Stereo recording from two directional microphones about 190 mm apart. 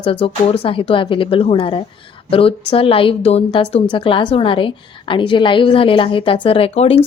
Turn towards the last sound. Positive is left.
turn(degrees=30)  # may be behind; listen again after turning